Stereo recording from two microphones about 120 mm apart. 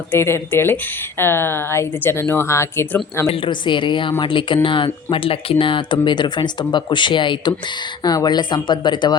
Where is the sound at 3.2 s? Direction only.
45° left (ahead or behind).